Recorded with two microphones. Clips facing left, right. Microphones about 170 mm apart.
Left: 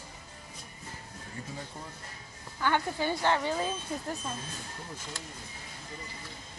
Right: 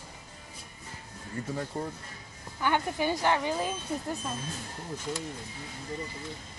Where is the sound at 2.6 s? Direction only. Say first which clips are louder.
Right 1 dB; 15° right (ahead or behind).